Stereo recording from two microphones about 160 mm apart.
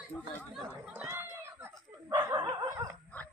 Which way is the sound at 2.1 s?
20° right (ahead or behind).